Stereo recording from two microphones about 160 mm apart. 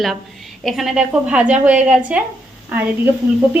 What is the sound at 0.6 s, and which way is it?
A woman's voice, centre (ahead or behind).